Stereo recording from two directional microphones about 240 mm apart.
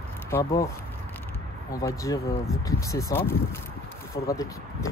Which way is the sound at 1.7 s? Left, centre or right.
Centre.